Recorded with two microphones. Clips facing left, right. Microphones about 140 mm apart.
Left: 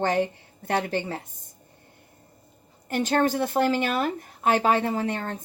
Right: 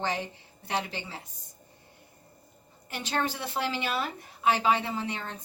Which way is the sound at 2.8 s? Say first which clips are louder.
Left 8 dB; 50° left (ahead or behind).